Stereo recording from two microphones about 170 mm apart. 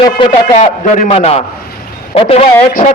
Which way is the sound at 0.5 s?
45° left (ahead or behind).